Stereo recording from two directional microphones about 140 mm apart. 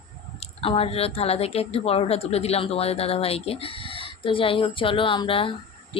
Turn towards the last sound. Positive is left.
turn(degrees=40)  # may be behind; listen again after turning